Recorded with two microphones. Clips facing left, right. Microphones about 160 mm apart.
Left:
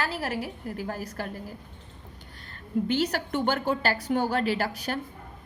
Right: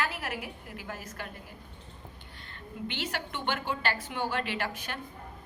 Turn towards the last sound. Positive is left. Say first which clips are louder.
# left 7 dB
turn(degrees=40)  # may be behind; listen again after turning